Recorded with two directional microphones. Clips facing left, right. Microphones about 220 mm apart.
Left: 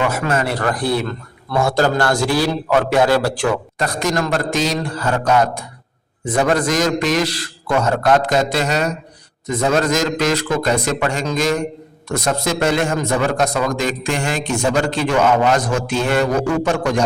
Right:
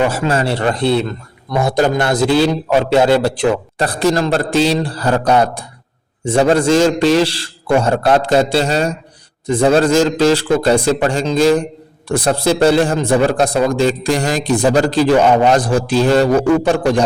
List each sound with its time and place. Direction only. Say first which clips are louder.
0.0 s speech: right 3 dB; 30° right (ahead or behind)
3.8 s a man's voice: right 5 dB; 30° right (ahead or behind)